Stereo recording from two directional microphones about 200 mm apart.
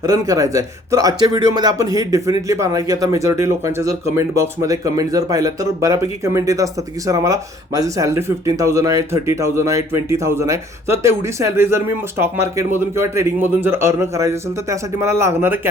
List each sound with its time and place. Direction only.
0.0 s speech: 15° right (ahead or behind)